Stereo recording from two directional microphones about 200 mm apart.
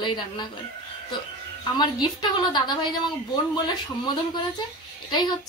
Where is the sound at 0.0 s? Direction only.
20° left (ahead or behind).